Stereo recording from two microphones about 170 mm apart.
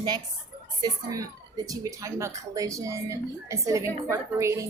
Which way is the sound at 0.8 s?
20° right (ahead or behind).